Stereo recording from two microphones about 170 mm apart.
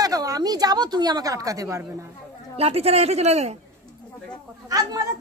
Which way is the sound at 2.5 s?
35° right (ahead or behind).